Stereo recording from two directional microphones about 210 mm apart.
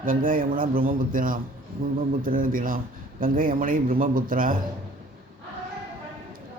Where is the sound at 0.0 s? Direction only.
40° right (ahead or behind).